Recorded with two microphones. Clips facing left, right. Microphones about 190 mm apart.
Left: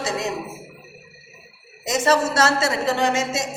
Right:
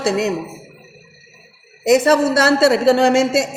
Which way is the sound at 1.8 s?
60° right (ahead or behind).